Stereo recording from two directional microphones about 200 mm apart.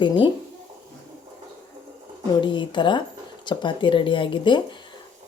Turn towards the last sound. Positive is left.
turn(degrees=25)  # may be behind; listen again after turning